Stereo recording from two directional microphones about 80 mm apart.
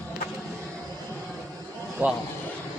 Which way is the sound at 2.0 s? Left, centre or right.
Centre.